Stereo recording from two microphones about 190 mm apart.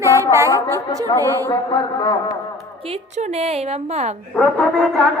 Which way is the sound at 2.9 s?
35° right (ahead or behind).